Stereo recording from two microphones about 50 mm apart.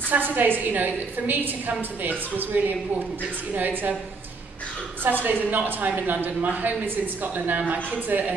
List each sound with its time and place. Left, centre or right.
0.1 s a woman's voice: right
5.0 s a woman's voice: right